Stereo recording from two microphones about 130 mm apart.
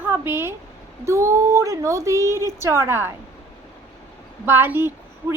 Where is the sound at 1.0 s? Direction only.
20° right (ahead or behind).